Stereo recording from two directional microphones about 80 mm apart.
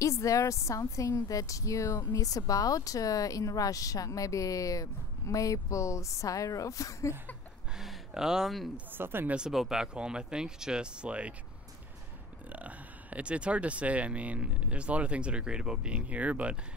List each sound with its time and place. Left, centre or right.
0.0 s a woman's voice: left
7.7 s a sound: centre
8.7 s speech: right
9.3 s speech: centre
12.5 s speech: centre